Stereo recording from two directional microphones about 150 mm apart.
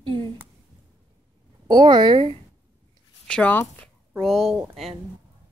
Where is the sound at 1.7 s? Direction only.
30° right (ahead or behind).